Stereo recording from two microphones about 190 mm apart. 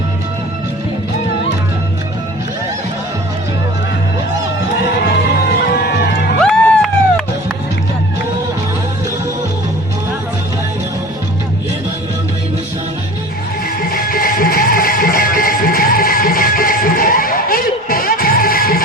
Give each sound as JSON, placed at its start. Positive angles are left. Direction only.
{"t": 6.4, "sound": "music", "side_deg": 5}
{"t": 13.9, "sound": "music", "side_deg": 50}